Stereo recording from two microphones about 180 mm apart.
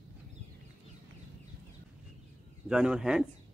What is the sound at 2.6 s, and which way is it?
Speech, 5° right (ahead or behind).